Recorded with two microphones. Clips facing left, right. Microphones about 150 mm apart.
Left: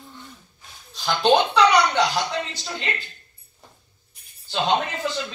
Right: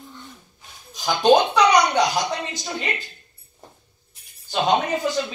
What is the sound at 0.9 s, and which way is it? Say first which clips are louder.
Speech: right 2 dB; 15° right (ahead or behind).